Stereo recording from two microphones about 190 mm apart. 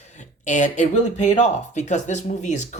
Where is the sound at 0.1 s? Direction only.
40° left (ahead or behind).